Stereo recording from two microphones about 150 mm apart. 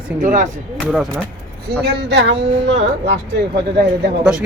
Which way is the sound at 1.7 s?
90° right.